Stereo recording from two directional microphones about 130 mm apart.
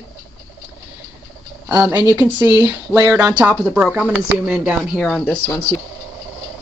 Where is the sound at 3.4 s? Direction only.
10° right (ahead or behind).